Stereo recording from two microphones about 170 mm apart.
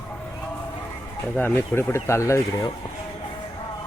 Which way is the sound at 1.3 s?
10° left (ahead or behind).